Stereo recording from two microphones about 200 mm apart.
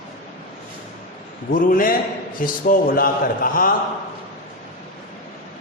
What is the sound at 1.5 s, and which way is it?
A man's voice, 45° left (ahead or behind).